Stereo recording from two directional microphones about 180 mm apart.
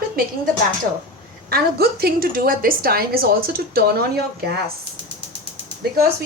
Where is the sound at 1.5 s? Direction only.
60° right (ahead or behind).